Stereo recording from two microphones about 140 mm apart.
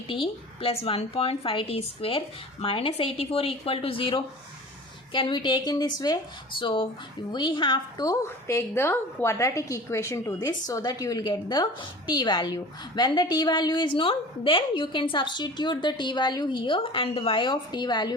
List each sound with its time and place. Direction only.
0.1 s a woman's voice: 40° left (ahead or behind)